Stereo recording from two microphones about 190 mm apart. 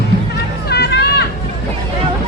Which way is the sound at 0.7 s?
60° left (ahead or behind).